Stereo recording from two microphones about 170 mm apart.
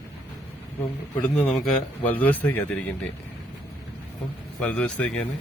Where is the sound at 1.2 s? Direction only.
Centre (ahead or behind).